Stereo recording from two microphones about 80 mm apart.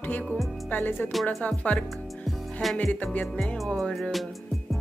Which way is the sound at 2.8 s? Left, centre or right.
Centre.